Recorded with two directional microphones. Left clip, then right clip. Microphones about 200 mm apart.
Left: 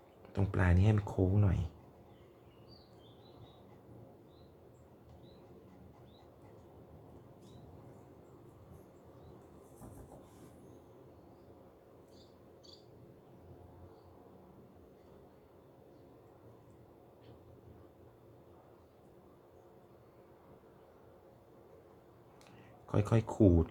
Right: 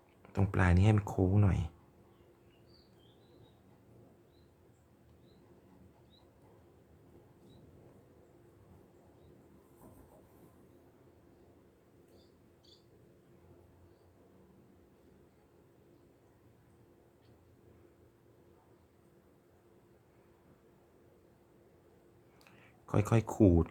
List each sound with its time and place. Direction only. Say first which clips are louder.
0.3 s speech: right 2 dB; 20° right (ahead or behind)
22.9 s speech: right 1 dB; 15° right (ahead or behind)